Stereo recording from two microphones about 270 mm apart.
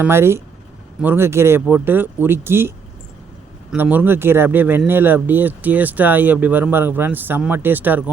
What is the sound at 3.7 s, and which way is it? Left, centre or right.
A man's voice, centre.